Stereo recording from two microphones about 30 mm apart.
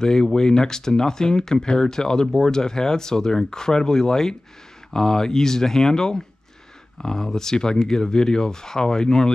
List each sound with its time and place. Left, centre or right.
0.0 s speech: centre